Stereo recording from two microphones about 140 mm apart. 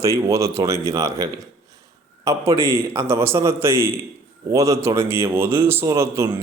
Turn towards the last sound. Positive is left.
turn(degrees=-20)  # may be behind; listen again after turning